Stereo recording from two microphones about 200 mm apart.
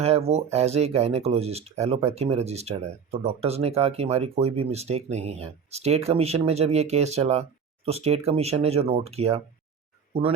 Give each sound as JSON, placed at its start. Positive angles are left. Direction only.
{"t": 0.0, "sound": "speech", "side_deg": -30}